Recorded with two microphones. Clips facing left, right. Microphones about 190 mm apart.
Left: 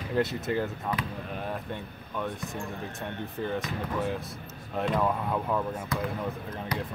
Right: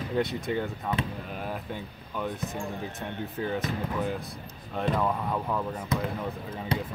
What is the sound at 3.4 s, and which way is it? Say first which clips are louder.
Speech: right 2 dB; centre (ahead or behind).